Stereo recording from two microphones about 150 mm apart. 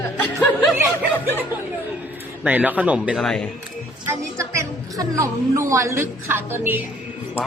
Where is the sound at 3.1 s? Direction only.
5° left (ahead or behind).